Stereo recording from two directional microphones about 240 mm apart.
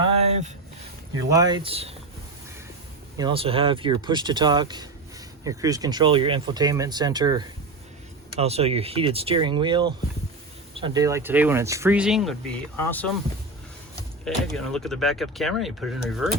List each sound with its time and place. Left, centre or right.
0.0 s a sound: right
1.1 s speech: centre
3.2 s speech: right; by 13.1 s centre
14.3 s speech: centre